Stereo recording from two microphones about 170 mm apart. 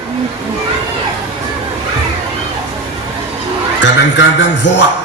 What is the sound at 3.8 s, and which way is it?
A man's voice, 90° left.